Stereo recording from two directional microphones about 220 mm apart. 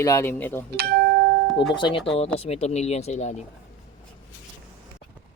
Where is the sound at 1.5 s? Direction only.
20° left (ahead or behind).